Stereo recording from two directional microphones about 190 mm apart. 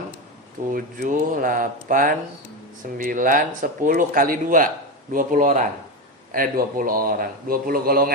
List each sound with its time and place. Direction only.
0.7 s speech: 45° right (ahead or behind)